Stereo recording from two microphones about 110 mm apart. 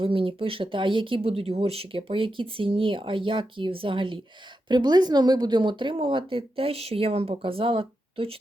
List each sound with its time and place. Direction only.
0.0 s speech: 55° right (ahead or behind)